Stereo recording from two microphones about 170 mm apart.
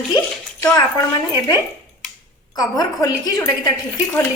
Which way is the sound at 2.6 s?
20° left (ahead or behind).